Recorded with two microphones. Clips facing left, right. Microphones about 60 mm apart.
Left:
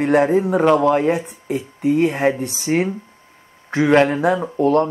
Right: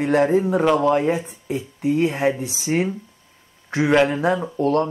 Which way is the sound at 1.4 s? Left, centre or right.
Left.